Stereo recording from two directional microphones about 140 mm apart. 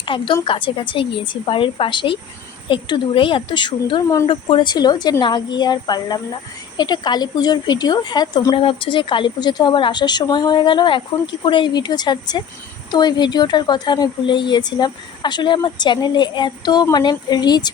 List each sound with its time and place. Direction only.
0.0 s a woman's voice: 35° left (ahead or behind)